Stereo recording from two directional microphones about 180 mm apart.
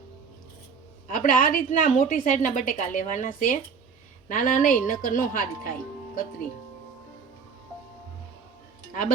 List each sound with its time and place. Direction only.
1.0 s a woman's voice: 45° left (ahead or behind)
8.9 s speech: 50° left (ahead or behind)